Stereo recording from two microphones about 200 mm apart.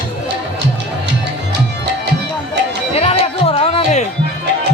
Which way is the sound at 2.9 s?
30° left (ahead or behind).